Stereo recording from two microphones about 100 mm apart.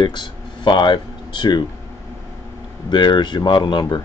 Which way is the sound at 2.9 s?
50° left (ahead or behind).